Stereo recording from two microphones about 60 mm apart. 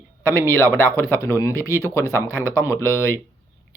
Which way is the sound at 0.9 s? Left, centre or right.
Left.